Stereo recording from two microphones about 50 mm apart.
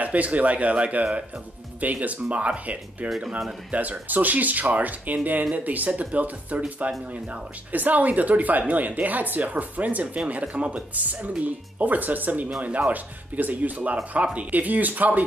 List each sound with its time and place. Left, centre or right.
0.0 s speech: right
3.2 s speech: centre
3.7 s speech: right